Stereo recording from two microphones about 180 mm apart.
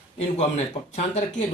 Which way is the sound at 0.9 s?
40° left (ahead or behind).